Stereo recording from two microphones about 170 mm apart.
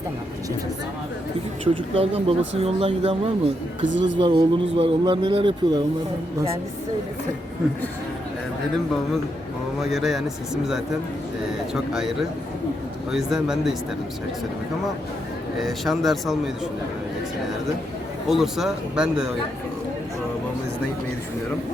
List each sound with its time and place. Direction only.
1.6 s speech: 35° right (ahead or behind)
3.8 s speech: 90° right
4.2 s speech: 30° right (ahead or behind)
9.8 s speech: centre (ahead or behind)
15.5 s speech: centre (ahead or behind)
18.3 s speech: centre (ahead or behind)